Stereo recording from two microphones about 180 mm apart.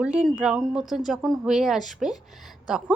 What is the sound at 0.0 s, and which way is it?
A woman's voice, 5° right (ahead or behind).